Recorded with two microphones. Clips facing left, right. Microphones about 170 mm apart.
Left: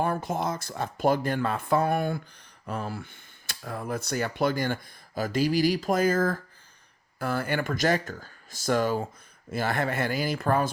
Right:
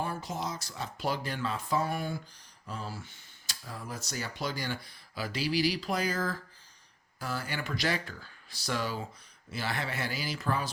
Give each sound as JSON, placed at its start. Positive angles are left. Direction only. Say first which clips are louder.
{"t": 0.0, "sound": "speech", "louder": "left 7 dB", "side_deg": 55}